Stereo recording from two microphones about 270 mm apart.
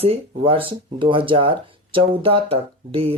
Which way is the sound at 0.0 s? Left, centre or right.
Right.